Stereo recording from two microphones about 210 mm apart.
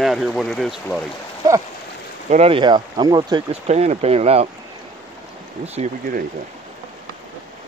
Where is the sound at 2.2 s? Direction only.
30° right (ahead or behind).